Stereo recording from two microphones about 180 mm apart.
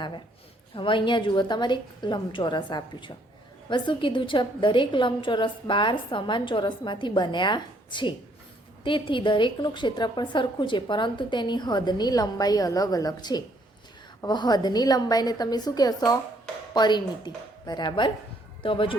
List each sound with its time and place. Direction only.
0.8 s a woman's voice: 25° left (ahead or behind)